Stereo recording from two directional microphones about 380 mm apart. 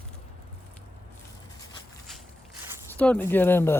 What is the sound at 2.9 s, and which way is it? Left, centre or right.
Speech, centre.